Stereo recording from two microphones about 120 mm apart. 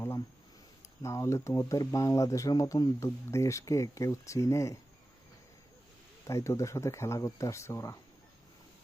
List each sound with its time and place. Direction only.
1.0 s speech: 25° left (ahead or behind)
6.2 s speech: 25° left (ahead or behind)